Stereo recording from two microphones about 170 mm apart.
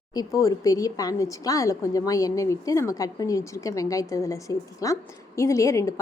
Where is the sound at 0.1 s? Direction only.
20° left (ahead or behind).